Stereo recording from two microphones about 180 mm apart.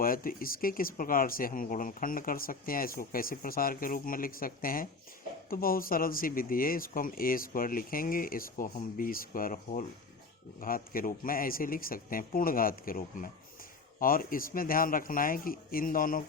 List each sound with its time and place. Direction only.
0.0 s speech: 50° left (ahead or behind)